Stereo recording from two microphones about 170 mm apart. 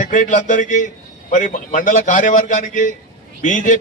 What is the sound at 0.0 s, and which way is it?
A man's voice, 50° left (ahead or behind).